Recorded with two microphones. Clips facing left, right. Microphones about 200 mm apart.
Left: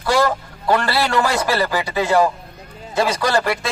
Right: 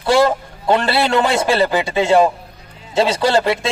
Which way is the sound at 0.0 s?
25° right (ahead or behind).